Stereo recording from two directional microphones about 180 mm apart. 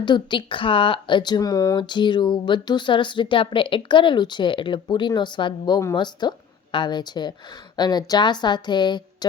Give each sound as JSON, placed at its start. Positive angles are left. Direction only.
{"t": 0.0, "sound": "speech", "side_deg": 25}